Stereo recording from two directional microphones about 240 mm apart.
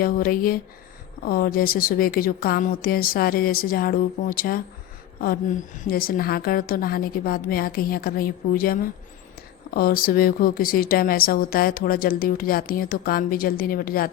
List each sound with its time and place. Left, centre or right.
0.0 s a woman's voice: left